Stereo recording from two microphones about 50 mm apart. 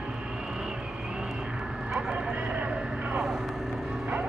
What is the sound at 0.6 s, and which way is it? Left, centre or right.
Vehicle, centre.